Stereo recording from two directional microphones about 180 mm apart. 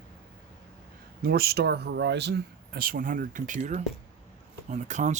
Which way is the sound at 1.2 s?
60° right (ahead or behind).